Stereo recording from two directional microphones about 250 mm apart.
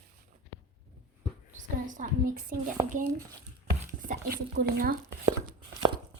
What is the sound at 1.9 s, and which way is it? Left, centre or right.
Speech, right.